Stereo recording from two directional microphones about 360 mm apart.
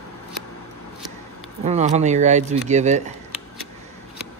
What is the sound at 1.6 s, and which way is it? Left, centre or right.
Speech, centre.